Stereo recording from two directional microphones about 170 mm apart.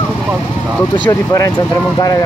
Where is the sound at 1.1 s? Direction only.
20° left (ahead or behind).